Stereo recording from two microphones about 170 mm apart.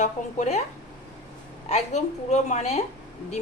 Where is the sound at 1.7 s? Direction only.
40° left (ahead or behind).